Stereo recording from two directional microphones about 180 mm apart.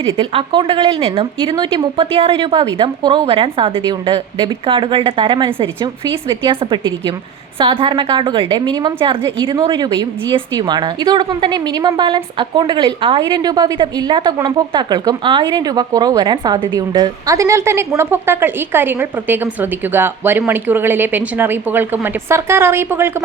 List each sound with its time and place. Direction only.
0.2 s a woman's voice: 30° right (ahead or behind); by 23.1 s 10° right (ahead or behind)